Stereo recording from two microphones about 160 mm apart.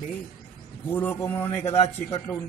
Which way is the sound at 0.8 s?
15° left (ahead or behind).